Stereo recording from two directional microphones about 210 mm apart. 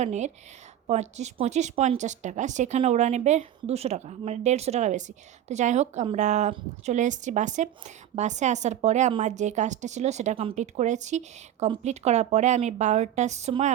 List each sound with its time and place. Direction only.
0.0 s speech: 35° right (ahead or behind)